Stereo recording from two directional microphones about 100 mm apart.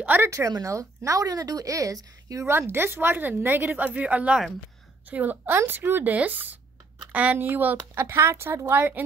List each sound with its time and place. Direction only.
0.0 s a woman's voice: 20° right (ahead or behind)
0.3 s a woman's voice: 30° right (ahead or behind)